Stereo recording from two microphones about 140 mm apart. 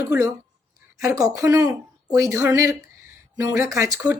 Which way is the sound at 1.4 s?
25° right (ahead or behind).